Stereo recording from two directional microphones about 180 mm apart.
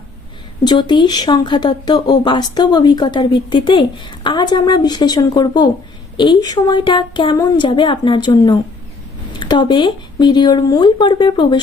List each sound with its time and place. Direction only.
0.6 s speech: 25° left (ahead or behind)